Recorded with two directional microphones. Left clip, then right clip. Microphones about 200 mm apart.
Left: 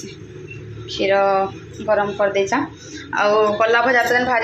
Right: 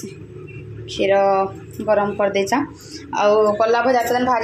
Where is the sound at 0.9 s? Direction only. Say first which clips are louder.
Even; 20° right (ahead or behind).